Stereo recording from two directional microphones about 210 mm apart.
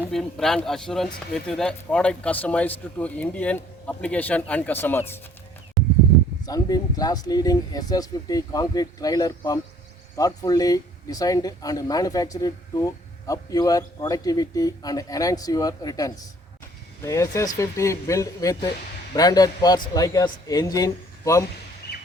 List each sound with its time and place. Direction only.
0.1 s speech: centre (ahead or behind)
6.4 s speech: 15° left (ahead or behind)
21.9 s bird: 50° left (ahead or behind)